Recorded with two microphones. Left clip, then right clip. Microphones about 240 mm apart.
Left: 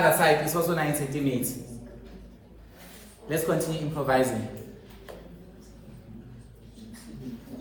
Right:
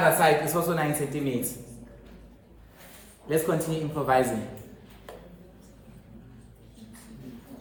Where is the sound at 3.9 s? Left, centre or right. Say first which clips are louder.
Right 1 dB; right.